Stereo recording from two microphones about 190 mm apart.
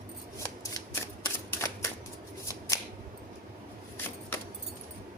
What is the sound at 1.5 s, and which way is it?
Camera, 15° left (ahead or behind).